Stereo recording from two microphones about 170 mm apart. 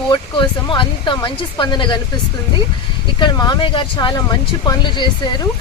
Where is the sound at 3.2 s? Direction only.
25° left (ahead or behind).